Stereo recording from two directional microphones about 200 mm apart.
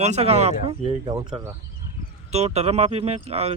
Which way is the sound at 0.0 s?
30° right (ahead or behind).